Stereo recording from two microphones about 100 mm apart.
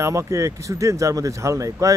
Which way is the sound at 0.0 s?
30° right (ahead or behind).